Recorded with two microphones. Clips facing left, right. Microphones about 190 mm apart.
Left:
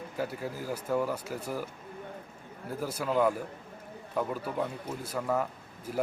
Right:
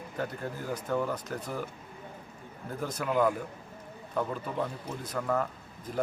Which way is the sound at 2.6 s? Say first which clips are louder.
Left 1 dB; 10° left (ahead or behind).